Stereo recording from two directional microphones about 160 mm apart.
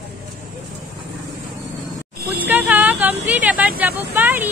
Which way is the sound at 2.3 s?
10° right (ahead or behind).